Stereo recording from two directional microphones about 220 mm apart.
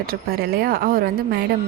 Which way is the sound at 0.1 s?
45° right (ahead or behind).